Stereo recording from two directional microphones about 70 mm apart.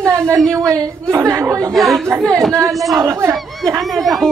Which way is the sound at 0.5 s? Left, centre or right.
Right.